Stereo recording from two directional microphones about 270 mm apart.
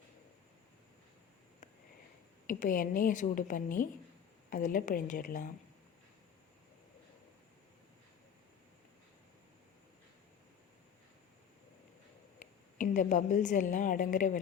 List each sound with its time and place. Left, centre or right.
2.5 s a woman's voice: left
12.8 s a woman's voice: left